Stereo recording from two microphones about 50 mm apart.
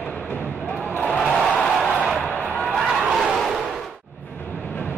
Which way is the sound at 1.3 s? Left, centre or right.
Centre.